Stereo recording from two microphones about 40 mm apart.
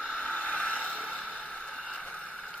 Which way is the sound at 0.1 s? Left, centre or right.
Left.